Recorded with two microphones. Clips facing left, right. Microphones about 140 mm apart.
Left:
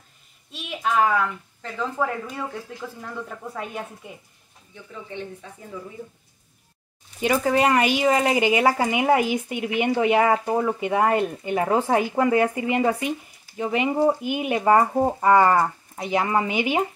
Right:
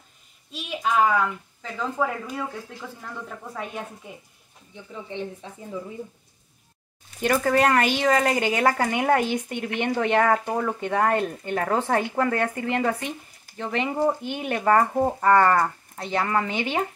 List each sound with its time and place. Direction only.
0.5 s a woman's voice: centre (ahead or behind)
5.1 s speech: 20° right (ahead or behind)
7.2 s speech: 5° left (ahead or behind)